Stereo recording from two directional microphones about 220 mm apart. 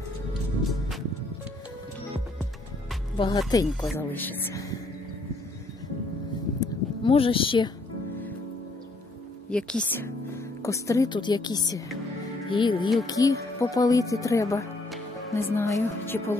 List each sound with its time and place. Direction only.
3.2 s speech: 20° left (ahead or behind)
6.6 s a sound: 25° left (ahead or behind)
9.5 s speech: 5° left (ahead or behind)